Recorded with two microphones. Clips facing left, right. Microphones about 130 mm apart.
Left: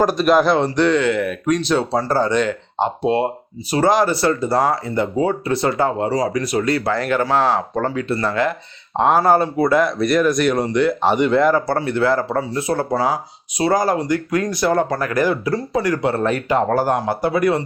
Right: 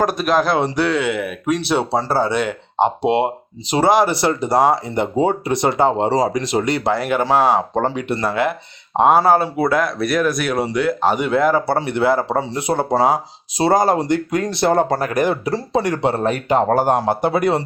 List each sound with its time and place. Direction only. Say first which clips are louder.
0.0 s speech: left 2 dB; centre (ahead or behind); by 17.6 s 25° right (ahead or behind)